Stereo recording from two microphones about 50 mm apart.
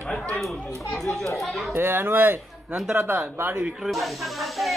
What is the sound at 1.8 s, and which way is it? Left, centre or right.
Speech, right.